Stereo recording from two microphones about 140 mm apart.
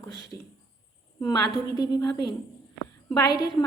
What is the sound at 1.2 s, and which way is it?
A woman's voice, 30° left (ahead or behind).